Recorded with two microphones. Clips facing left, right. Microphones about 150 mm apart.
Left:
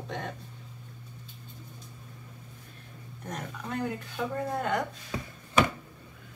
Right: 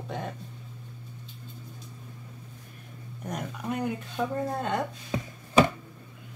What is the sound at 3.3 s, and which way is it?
Speech, 10° right (ahead or behind).